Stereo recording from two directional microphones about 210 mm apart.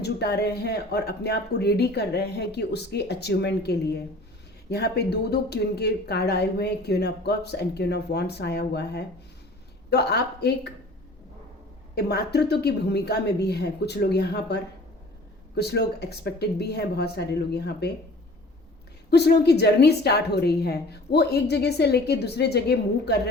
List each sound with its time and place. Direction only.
0.0 s speech: 50° left (ahead or behind)
11.9 s speech: 50° left (ahead or behind)
19.1 s speech: 50° left (ahead or behind)